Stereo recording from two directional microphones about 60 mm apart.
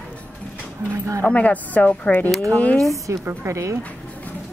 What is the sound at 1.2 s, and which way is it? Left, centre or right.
Speech, left.